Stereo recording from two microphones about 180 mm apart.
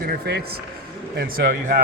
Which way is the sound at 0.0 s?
60° right (ahead or behind).